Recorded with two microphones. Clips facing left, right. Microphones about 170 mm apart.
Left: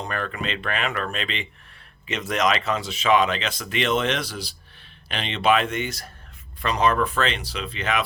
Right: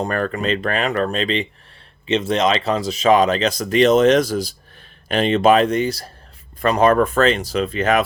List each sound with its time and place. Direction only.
0.0 s speech: 45° right (ahead or behind)
6.6 s speech: 50° right (ahead or behind)